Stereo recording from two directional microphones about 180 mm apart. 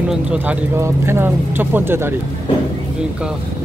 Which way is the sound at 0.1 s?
5° right (ahead or behind).